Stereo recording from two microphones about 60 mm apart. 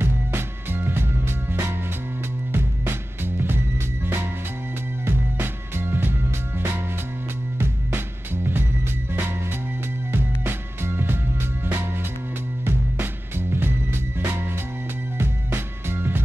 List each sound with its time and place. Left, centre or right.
0.0 s music: right